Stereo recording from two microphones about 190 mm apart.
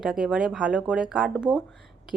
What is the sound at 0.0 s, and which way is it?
Speech, centre (ahead or behind).